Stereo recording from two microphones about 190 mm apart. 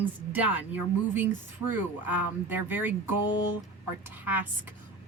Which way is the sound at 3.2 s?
20° left (ahead or behind).